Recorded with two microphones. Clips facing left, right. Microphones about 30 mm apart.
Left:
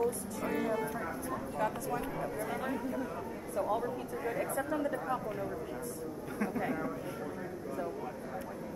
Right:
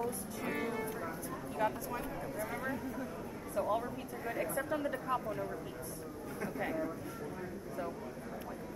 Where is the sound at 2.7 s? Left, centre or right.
Centre.